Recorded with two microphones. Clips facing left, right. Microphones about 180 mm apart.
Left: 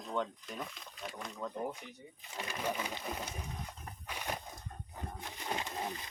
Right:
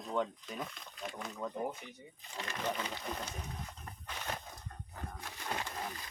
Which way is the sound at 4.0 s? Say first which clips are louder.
Left 2 dB; 10° left (ahead or behind).